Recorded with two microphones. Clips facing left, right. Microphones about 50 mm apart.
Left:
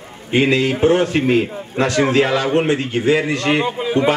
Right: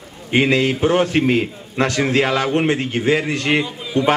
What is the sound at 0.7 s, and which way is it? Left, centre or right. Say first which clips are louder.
A man's voice: left 2 dB; left.